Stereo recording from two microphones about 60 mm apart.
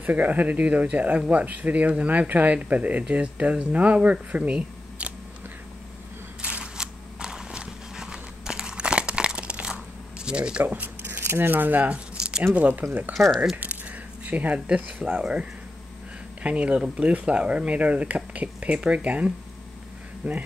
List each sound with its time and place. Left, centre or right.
0.0 s speech: right
6.4 s walk: centre
10.6 s speech: right
12.2 s a sound: centre
12.5 s speech: right
13.1 s speech: centre
13.6 s speech: right
16.4 s speech: right